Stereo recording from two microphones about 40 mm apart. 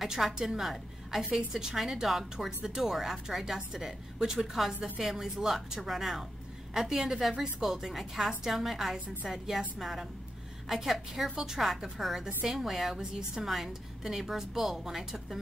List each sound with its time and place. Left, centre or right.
0.0 s a woman's voice: centre